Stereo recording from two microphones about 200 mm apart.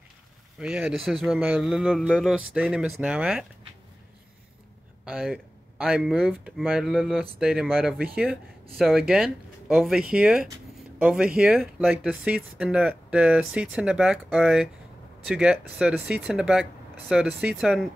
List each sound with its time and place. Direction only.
0.6 s speech: 5° right (ahead or behind)
5.0 s speech: centre (ahead or behind)